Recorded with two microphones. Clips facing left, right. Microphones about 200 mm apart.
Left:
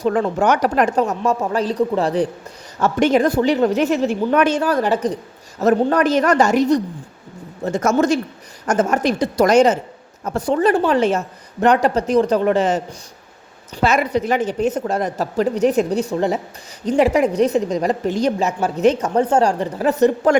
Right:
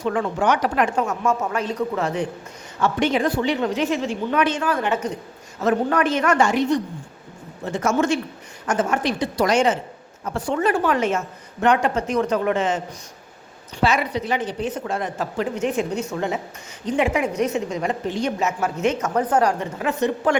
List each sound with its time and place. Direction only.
0.0 s a woman's voice: 40° left (ahead or behind)
13.8 s a woman's voice: 45° left (ahead or behind)